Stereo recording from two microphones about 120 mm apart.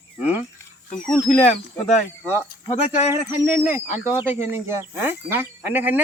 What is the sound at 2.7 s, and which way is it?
Speech, 65° left (ahead or behind).